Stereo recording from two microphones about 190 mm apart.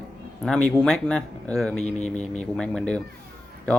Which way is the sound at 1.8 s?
35° left (ahead or behind).